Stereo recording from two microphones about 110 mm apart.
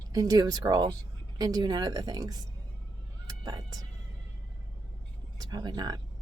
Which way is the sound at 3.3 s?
35° right (ahead or behind).